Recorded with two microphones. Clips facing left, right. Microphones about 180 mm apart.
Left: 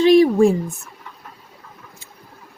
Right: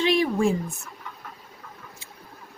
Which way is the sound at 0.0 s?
40° left (ahead or behind).